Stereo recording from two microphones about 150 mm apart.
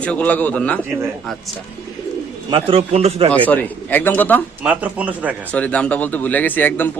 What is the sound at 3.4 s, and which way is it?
Speech, 10° left (ahead or behind).